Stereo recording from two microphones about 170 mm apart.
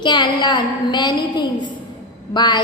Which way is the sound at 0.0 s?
25° left (ahead or behind).